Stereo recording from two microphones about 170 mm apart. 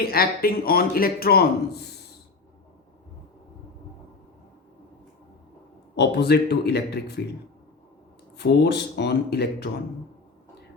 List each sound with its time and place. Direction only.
0.0 s a man's voice: 65° left (ahead or behind)
6.0 s speech: 80° left
8.4 s speech: 75° left (ahead or behind)